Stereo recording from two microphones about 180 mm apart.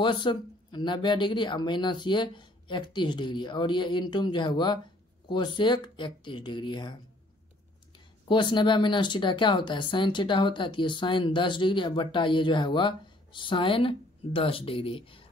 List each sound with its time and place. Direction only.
0.0 s speech: 25° left (ahead or behind)
8.3 s speech: 25° left (ahead or behind)